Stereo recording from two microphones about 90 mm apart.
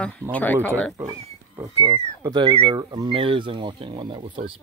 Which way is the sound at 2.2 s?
50° right (ahead or behind).